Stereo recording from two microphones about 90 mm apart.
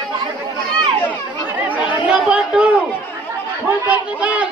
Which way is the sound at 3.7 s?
15° right (ahead or behind).